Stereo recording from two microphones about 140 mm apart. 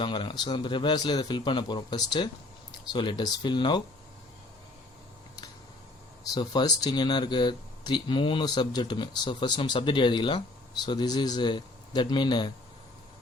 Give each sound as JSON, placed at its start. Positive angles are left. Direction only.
{"t": 0.0, "sound": "speech", "side_deg": 35}
{"t": 6.3, "sound": "speech", "side_deg": 30}